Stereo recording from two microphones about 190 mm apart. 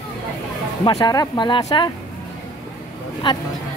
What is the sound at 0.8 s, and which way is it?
Speech, 20° left (ahead or behind).